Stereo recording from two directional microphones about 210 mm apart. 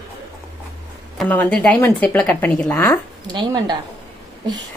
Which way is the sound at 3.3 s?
20° right (ahead or behind).